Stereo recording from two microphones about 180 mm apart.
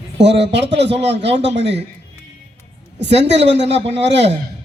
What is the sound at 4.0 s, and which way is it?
Speech, 75° right (ahead or behind).